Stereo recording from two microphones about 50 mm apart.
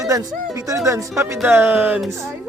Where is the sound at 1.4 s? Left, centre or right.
Right.